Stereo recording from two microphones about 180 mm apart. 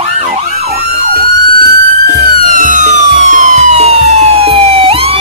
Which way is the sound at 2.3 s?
45° right (ahead or behind).